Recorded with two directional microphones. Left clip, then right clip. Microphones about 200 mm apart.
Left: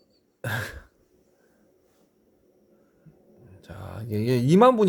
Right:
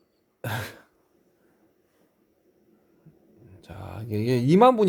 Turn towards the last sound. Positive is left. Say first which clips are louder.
# even
turn(degrees=0)  # may be behind; listen again after turning